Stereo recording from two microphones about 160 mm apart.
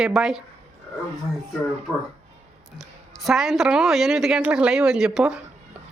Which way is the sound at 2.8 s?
Centre (ahead or behind).